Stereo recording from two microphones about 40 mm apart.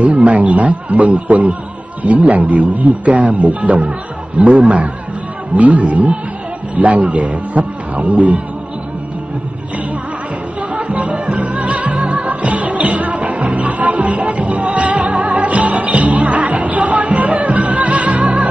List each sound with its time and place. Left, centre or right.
0.0 s a man's voice: right
10.7 s music: right